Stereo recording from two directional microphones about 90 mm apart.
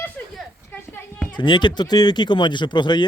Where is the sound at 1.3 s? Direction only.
60° left (ahead or behind).